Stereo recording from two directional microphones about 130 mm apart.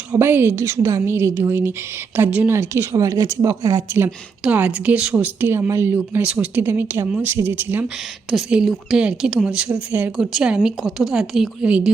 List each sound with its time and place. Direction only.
0.1 s a woman's voice: 15° right (ahead or behind)
8.3 s a woman's voice: 5° right (ahead or behind)